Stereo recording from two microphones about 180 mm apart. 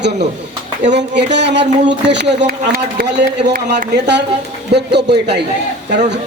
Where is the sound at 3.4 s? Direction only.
50° right (ahead or behind).